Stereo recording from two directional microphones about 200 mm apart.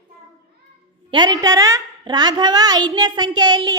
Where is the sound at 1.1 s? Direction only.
20° right (ahead or behind).